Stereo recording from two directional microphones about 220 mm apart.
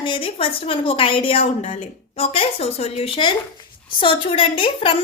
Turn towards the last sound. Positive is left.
turn(degrees=25)  # may be behind; listen again after turning